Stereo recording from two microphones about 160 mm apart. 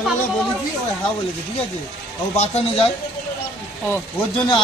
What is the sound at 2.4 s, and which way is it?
Speech, 40° left (ahead or behind).